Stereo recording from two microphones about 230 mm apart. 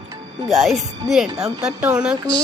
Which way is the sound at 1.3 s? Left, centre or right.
Centre.